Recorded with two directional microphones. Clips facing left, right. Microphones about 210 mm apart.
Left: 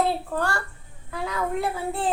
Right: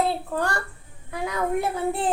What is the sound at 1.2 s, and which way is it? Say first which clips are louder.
Speech: right 2 dB; 20° right (ahead or behind).